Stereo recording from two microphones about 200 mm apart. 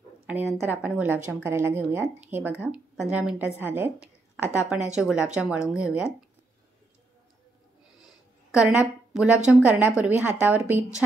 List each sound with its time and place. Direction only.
0.3 s a woman's voice: 10° right (ahead or behind)
8.0 s a sound: 5° right (ahead or behind)
9.5 s a woman's voice: 5° right (ahead or behind)